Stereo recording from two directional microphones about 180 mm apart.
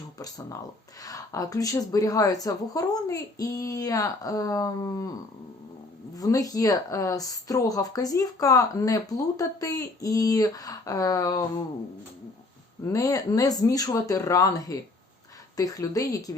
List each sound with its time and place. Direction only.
1.0 s speech: 20° left (ahead or behind)
6.1 s speech: 20° left (ahead or behind)
12.8 s speech: 20° left (ahead or behind)